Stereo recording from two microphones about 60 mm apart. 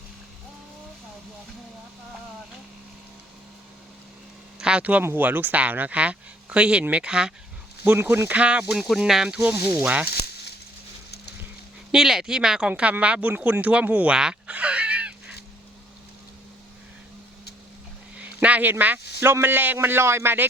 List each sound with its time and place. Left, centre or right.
4.6 s speech: right
7.9 s a man's voice: right
8.4 s speech: centre
8.6 s speech: centre; by 10.1 s right
11.9 s speech: centre; by 14.2 s right
14.2 s honk: centre
18.4 s speech: right
19.2 s a man's voice: right